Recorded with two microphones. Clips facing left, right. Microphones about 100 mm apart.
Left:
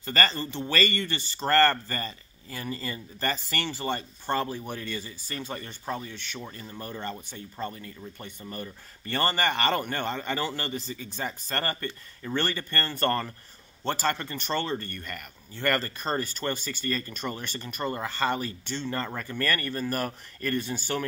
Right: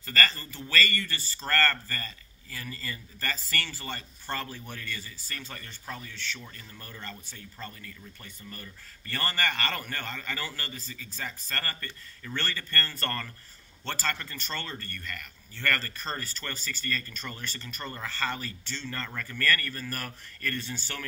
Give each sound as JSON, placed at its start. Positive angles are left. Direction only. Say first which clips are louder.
{"t": 0.0, "sound": "speech", "louder": "left 3 dB", "side_deg": 25}